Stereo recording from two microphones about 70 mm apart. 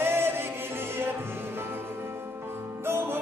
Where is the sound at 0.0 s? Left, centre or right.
Right.